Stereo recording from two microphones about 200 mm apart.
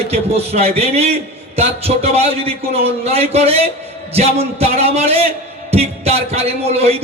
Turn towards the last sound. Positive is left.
turn(degrees=-30)  # may be behind; listen again after turning